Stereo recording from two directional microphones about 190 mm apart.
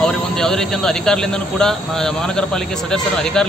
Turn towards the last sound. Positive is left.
turn(degrees=5)  # may be behind; listen again after turning